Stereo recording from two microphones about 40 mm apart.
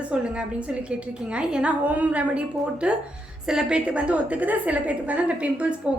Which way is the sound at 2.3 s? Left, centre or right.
Right.